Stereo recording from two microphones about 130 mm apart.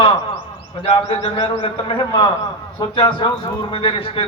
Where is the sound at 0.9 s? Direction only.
65° left (ahead or behind).